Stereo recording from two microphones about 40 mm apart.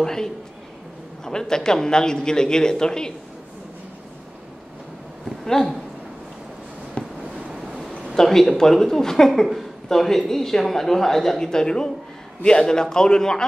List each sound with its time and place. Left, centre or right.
0.0 s speech: centre
5.4 s speech: centre
7.0 s fireworks: left
8.1 s speech: centre